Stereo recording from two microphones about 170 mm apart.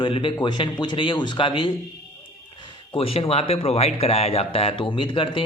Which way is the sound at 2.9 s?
35° left (ahead or behind).